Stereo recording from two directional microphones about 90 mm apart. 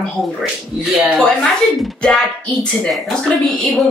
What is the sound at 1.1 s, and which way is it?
A woman's voice, 5° left (ahead or behind).